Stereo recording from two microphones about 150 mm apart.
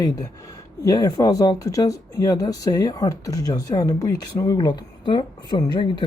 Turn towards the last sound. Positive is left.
turn(degrees=30)  # may be behind; listen again after turning